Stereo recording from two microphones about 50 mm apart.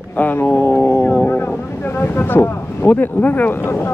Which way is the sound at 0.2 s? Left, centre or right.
Left.